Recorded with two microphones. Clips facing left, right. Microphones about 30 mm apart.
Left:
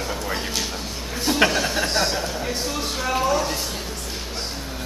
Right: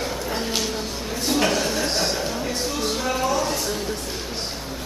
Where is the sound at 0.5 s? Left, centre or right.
Centre.